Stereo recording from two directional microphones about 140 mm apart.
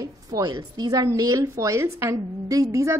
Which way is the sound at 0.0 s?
25° right (ahead or behind).